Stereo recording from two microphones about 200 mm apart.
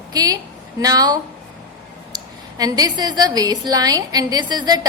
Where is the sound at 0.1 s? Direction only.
20° right (ahead or behind).